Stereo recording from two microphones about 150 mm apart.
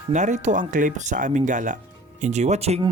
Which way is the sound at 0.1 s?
55° right (ahead or behind).